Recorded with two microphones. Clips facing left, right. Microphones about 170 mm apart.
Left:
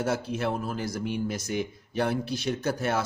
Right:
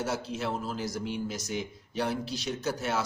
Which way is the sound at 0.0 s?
55° left (ahead or behind).